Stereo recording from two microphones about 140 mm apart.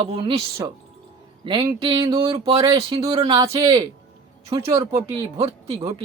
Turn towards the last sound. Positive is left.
turn(degrees=-40)  # may be behind; listen again after turning